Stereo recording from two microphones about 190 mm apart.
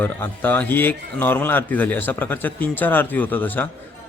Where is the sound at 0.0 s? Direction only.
10° left (ahead or behind).